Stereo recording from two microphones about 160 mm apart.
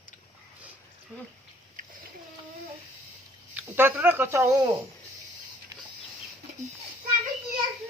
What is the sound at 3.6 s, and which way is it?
Speech, 10° right (ahead or behind).